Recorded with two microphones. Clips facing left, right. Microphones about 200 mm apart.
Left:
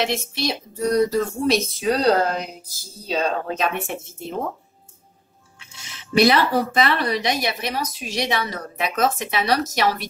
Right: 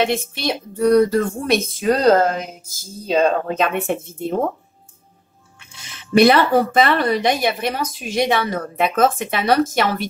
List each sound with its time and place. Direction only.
0.1 s speech: 55° right (ahead or behind)
5.8 s speech: 55° right (ahead or behind)